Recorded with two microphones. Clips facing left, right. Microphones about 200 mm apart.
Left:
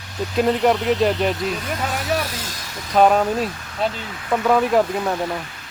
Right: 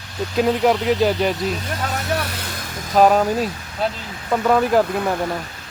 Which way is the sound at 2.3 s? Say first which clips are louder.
Right 1 dB; 60° right (ahead or behind).